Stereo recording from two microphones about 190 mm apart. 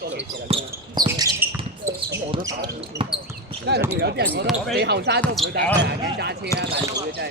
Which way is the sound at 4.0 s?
60° right (ahead or behind).